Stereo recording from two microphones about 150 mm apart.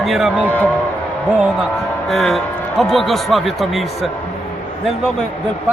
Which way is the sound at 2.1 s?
Centre (ahead or behind).